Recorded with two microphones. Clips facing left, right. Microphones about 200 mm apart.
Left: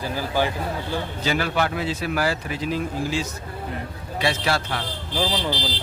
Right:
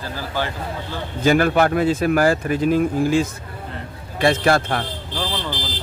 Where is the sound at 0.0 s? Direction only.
15° left (ahead or behind).